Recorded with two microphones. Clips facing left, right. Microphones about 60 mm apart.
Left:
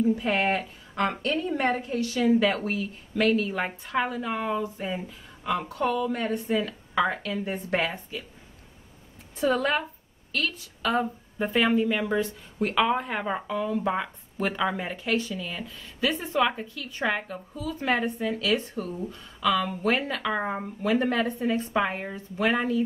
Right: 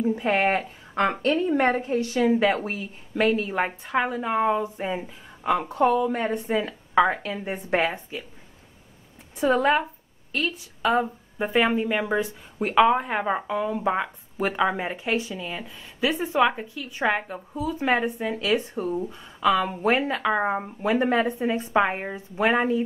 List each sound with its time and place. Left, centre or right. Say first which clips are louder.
0.0 s a woman's voice: right 2 dB; right
9.4 s a woman's voice: right 4 dB; right